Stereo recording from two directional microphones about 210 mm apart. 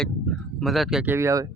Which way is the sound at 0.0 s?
Centre (ahead or behind).